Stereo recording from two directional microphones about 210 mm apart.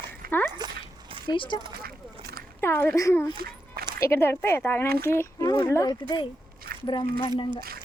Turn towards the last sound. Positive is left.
turn(degrees=25)  # may be behind; listen again after turning